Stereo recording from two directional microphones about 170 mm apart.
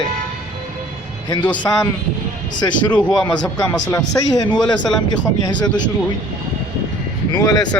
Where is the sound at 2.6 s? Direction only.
20° left (ahead or behind).